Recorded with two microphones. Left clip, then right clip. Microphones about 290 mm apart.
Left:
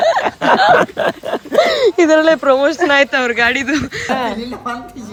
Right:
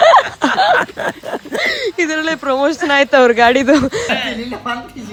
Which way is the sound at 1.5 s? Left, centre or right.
Centre.